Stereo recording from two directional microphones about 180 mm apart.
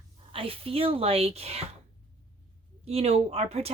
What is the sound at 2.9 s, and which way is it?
Speech, 35° right (ahead or behind).